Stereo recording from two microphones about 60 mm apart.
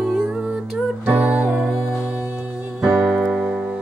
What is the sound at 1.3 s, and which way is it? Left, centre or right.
Music, centre.